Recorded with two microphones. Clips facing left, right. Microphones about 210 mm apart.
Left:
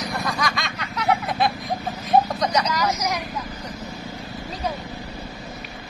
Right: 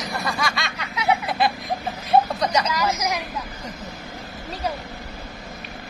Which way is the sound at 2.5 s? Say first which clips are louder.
Even; 5° right (ahead or behind).